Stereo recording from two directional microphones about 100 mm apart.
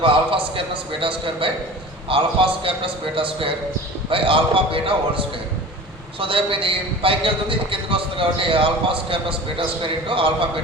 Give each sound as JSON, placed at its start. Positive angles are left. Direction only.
{"t": 0.0, "sound": "a man's voice", "side_deg": -60}